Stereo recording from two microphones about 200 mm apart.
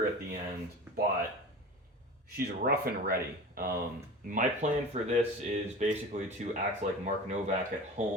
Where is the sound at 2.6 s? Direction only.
45° right (ahead or behind).